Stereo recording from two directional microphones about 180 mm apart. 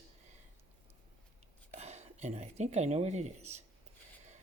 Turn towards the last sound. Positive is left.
turn(degrees=-35)  # may be behind; listen again after turning